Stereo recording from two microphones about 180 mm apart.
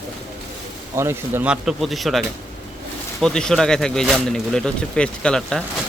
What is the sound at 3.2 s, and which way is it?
Speech, 5° left (ahead or behind).